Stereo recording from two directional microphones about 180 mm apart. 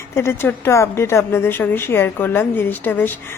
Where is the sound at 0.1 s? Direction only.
15° left (ahead or behind).